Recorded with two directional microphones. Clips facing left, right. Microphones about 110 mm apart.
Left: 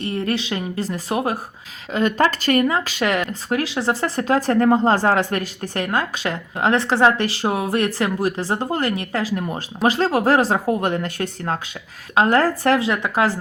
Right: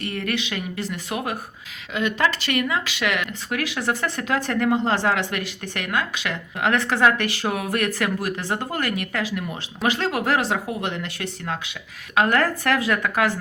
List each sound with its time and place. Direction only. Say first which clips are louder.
0.0 s speech: left 4 dB; 30° left (ahead or behind)
12.1 s speech: left 3 dB; 30° left (ahead or behind)